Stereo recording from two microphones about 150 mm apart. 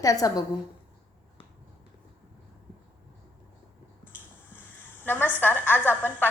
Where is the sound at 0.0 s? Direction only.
20° left (ahead or behind).